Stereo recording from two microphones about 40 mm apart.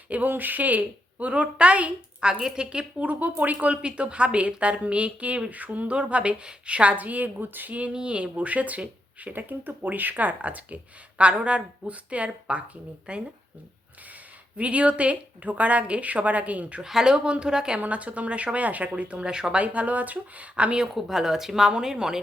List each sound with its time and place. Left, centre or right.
0.3 s speech: right
1.3 s a woman's voice: right
5.9 s a woman's voice: right
6.9 s speech: right
7.7 s a woman's voice: right
9.3 s speech: right
11.2 s a woman's voice: right
14.6 s a woman's voice: right
16.8 s a woman's voice: centre
17.7 s a woman's voice: right
19.6 s a woman's voice: right
20.9 s speech: centre